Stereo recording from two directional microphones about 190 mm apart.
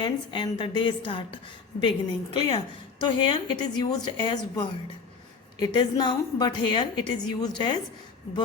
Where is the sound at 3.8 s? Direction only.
20° left (ahead or behind).